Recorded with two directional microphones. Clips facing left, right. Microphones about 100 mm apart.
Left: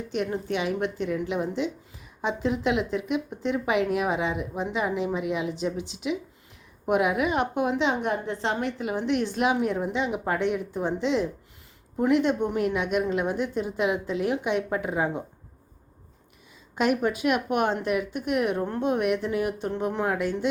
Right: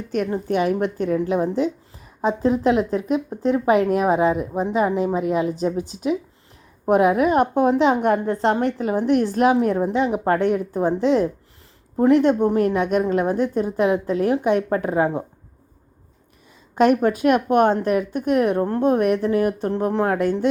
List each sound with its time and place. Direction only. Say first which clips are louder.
0.4 s a woman's voice: right 7 dB; 45° right (ahead or behind)
16.7 s a woman's voice: right 7 dB; 40° right (ahead or behind)